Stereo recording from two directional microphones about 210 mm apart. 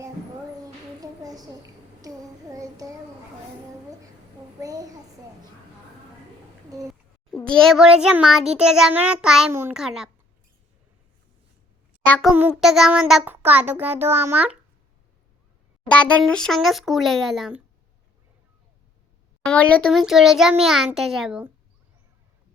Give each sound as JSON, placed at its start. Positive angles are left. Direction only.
{"t": 1.0, "sound": "a sound", "side_deg": -15}
{"t": 2.0, "sound": "child singing", "side_deg": -15}
{"t": 4.6, "sound": "a child's voice", "side_deg": -15}
{"t": 7.3, "sound": "a child's voice", "side_deg": 5}
{"t": 12.0, "sound": "a child's voice", "side_deg": 5}
{"t": 12.3, "sound": "child singing", "side_deg": -5}
{"t": 15.9, "sound": "a child's voice", "side_deg": 5}
{"t": 19.5, "sound": "a child's voice", "side_deg": 5}